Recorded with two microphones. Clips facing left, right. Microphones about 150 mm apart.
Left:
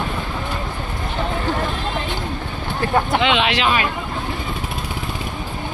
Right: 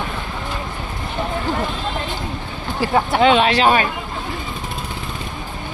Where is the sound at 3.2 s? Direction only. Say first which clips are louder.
Right 5 dB; 40° right (ahead or behind).